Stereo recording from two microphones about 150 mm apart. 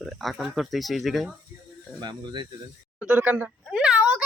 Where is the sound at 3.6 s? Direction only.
5° right (ahead or behind).